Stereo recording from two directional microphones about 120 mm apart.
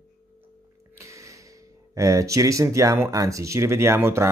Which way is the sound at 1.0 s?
25° right (ahead or behind).